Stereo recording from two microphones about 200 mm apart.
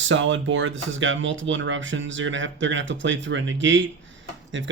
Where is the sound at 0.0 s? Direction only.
75° right (ahead or behind).